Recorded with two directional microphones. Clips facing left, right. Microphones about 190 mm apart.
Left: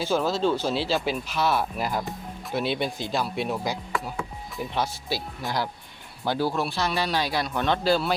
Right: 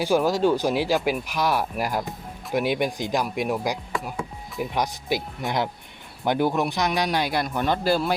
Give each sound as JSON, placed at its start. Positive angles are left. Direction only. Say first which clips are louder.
{"t": 0.0, "sound": "speech", "louder": "right 3 dB", "side_deg": -15}